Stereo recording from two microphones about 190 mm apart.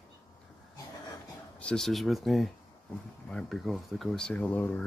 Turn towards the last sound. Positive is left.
turn(degrees=10)  # may be behind; listen again after turning